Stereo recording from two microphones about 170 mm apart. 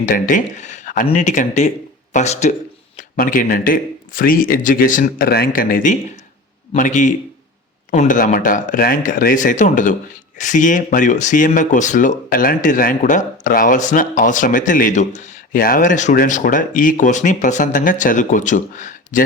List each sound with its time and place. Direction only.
0.0 s speech: 50° left (ahead or behind)
3.2 s speech: 55° left (ahead or behind)